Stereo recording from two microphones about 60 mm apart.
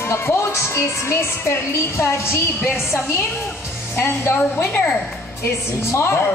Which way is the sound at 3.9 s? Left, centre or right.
Left.